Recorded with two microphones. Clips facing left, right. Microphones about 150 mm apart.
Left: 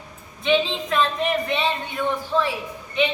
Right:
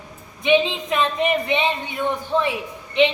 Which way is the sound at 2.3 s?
15° right (ahead or behind).